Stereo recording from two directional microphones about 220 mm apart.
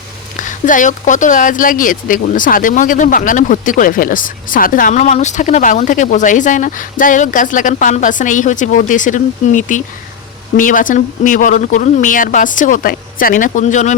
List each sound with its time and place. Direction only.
0.4 s speech: 35° left (ahead or behind)